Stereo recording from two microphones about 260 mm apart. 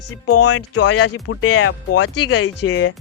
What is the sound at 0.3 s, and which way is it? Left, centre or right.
Speech, left.